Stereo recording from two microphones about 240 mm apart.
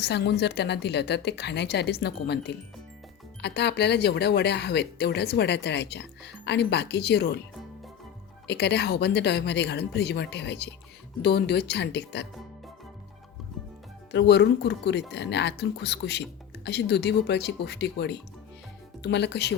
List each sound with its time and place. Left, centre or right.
0.0 s speech: left
8.4 s speech: left
14.1 s speech: left